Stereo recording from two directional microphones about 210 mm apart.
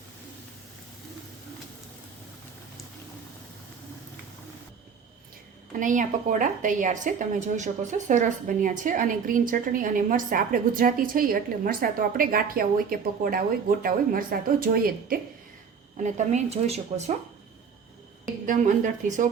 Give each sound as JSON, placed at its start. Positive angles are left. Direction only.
{"t": 5.8, "sound": "a woman's voice", "side_deg": -35}
{"t": 18.4, "sound": "a woman's voice", "side_deg": -40}